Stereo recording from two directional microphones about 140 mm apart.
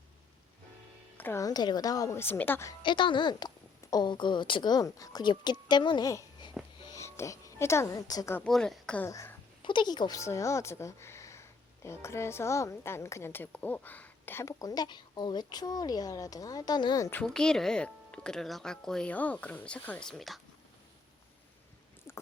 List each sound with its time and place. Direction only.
1.2 s speech: 20° left (ahead or behind)
2.8 s a woman's voice: 35° left (ahead or behind)
8.4 s speech: centre (ahead or behind)
9.0 s speech: 20° left (ahead or behind)
9.6 s speech: 35° left (ahead or behind)
17.1 s speech: 10° left (ahead or behind)
22.1 s stomach rumble: 20° left (ahead or behind)